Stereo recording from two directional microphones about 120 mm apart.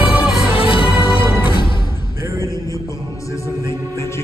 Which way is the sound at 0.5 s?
50° left (ahead or behind).